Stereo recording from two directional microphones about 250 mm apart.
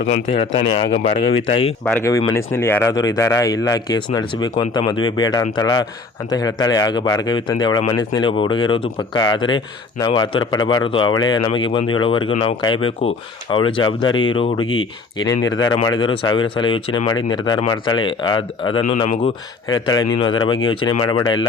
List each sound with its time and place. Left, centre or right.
0.8 s speech: left
1.8 s speech: centre; by 19.3 s left
19.6 s speech: centre